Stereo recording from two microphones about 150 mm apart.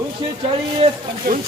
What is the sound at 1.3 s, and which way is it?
Speech, 75° right (ahead or behind).